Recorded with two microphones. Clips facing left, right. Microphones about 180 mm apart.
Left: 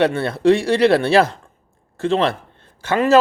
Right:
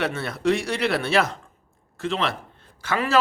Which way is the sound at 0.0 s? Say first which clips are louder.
Left 8 dB; 30° left (ahead or behind).